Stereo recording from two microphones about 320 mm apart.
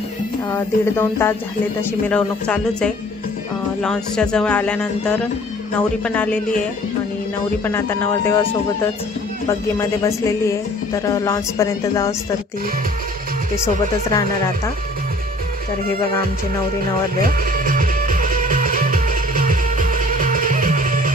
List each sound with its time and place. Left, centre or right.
0.5 s speech: centre
7.6 s speech: centre
9.5 s speech: centre
17.5 s music: right